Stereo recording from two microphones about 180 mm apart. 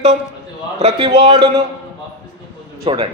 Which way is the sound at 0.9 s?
25° right (ahead or behind).